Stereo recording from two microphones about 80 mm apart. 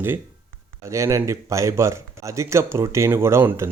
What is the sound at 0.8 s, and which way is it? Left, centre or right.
Speech, right.